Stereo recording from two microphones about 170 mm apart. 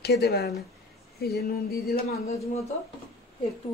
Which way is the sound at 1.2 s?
65° left (ahead or behind).